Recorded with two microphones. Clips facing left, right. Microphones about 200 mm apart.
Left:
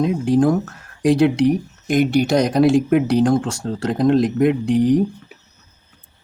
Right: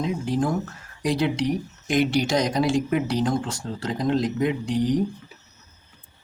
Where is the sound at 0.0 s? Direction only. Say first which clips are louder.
Left 8 dB; 55° left (ahead or behind).